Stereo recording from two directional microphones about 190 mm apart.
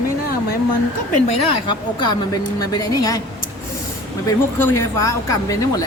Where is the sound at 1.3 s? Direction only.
25° left (ahead or behind).